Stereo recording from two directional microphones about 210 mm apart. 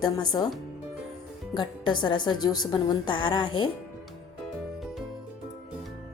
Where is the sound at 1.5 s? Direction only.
20° left (ahead or behind).